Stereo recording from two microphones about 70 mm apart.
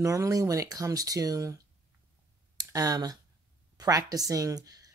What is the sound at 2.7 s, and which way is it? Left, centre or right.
Speech, right.